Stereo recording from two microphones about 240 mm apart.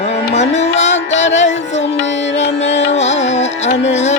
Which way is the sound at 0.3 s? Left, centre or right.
Left.